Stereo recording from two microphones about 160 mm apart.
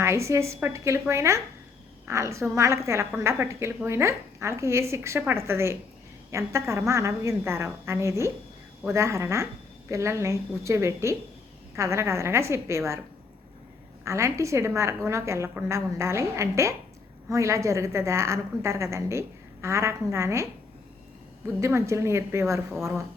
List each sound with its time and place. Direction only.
0.0 s a woman's voice: 15° right (ahead or behind)
14.0 s a woman's voice: 20° right (ahead or behind)
21.6 s a woman's voice: 15° right (ahead or behind)